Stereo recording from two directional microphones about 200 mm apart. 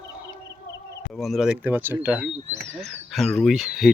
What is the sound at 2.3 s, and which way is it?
Speech, 35° right (ahead or behind).